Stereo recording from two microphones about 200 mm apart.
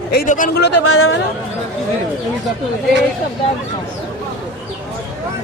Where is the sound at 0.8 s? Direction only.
90° left.